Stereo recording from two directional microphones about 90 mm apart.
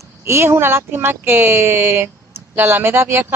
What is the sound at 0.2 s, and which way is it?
Speech, 30° right (ahead or behind).